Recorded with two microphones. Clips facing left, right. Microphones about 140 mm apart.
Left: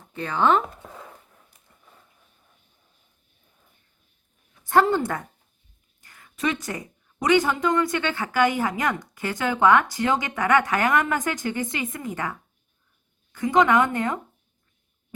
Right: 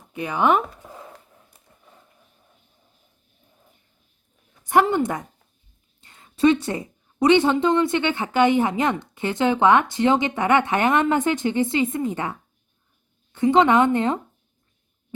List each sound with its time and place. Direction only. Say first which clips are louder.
0.0 s speech: right 1 dB; 15° right (ahead or behind)
4.6 s a woman's voice: right 1 dB; 15° right (ahead or behind)